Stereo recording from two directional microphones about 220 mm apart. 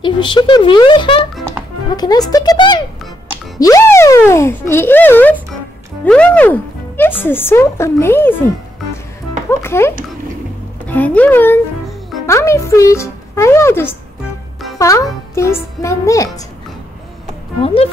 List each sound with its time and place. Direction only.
0.0 s a child's voice: 20° left (ahead or behind)
17.6 s speech: 25° left (ahead or behind)